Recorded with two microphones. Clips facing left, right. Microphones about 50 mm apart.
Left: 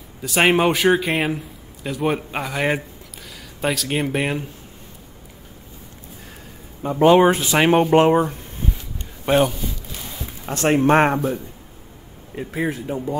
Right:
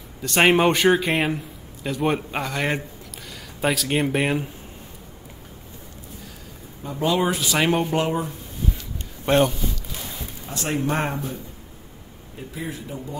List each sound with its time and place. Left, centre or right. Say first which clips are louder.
0.2 s a man's voice: even; centre
3.6 s a man's voice: even; centre
6.8 s speech: left 9 dB; left
9.2 s speech: left 1 dB; centre
10.5 s speech: left 9 dB; left
12.4 s speech: left 8 dB; left